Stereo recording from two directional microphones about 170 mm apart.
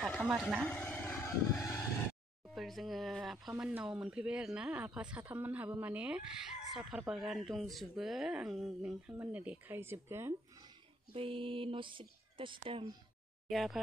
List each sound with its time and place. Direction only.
0.0 s a sound: centre (ahead or behind)
0.7 s vehicle: 10° left (ahead or behind)
2.4 s speech: centre (ahead or behind)
11.1 s speech: 30° right (ahead or behind)
13.5 s speech: centre (ahead or behind)